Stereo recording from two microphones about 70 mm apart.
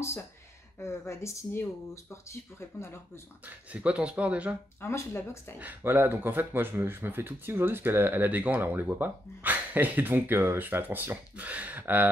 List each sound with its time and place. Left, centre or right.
0.7 s speech: left
3.4 s speech: centre
4.8 s speech: left
5.6 s speech: right